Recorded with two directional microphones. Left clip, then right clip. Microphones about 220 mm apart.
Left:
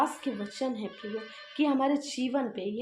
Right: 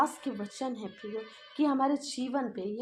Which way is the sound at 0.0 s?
30° right (ahead or behind).